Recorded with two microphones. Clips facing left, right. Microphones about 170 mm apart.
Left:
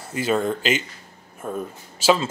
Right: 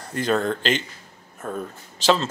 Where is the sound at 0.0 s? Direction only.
5° left (ahead or behind).